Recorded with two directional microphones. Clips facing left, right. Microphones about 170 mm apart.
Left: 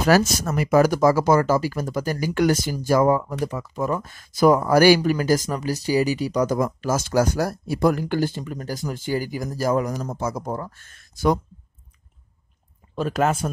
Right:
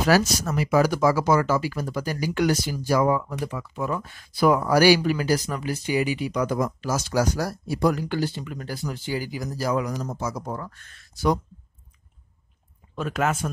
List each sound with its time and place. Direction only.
0.0 s speech: 45° left (ahead or behind)
12.9 s speech: 35° left (ahead or behind)